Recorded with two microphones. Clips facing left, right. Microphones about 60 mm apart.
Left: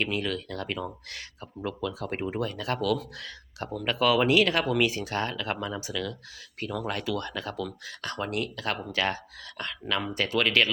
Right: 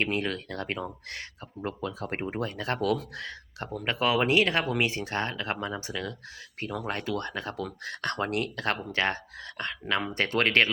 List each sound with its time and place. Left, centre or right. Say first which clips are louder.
0.0 s speech: even; right
7.9 s speech: right 3 dB; right
10.2 s speech: right 1 dB; right